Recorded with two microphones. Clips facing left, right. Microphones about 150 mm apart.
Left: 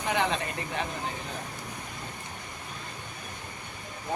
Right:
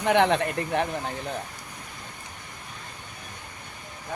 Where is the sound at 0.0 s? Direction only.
70° right (ahead or behind).